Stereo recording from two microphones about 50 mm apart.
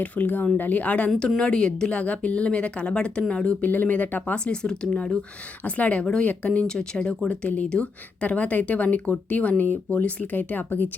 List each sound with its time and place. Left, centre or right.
0.0 s speech: left; by 1.9 s centre
1.9 s speech: left
3.6 s speech: left
4.4 s speech: centre
5.6 s speech: left
6.7 s speech: centre
7.3 s speech: left